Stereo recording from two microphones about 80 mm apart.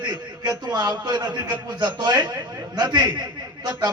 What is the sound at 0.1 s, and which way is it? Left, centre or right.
A man's voice, right.